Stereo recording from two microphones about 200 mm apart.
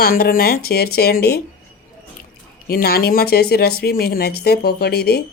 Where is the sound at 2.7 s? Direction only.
50° left (ahead or behind).